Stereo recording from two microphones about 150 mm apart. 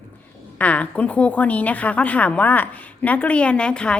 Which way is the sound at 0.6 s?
10° left (ahead or behind).